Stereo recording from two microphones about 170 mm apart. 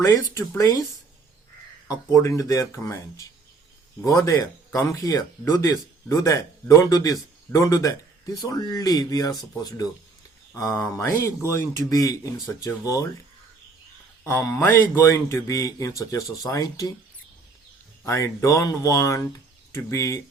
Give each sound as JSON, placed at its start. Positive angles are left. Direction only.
{"t": 0.0, "sound": "speech", "side_deg": 20}
{"t": 1.9, "sound": "speech", "side_deg": 15}
{"t": 14.3, "sound": "speech", "side_deg": 15}
{"t": 18.0, "sound": "speech", "side_deg": 15}